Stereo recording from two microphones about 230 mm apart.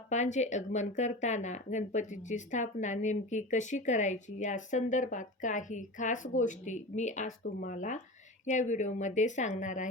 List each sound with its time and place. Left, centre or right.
0.1 s speech: left